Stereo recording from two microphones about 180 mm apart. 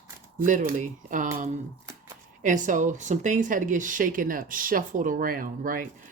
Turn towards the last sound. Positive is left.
turn(degrees=-50)  # may be behind; listen again after turning